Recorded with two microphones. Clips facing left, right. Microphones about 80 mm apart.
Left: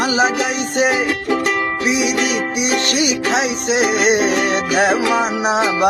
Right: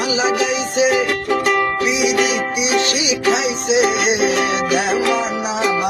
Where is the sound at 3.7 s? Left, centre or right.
Left.